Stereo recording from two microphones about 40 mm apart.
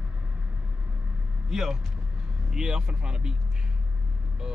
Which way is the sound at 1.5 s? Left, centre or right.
Centre.